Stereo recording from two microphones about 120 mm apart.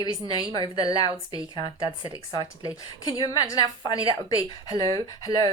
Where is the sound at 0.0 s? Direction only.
35° left (ahead or behind).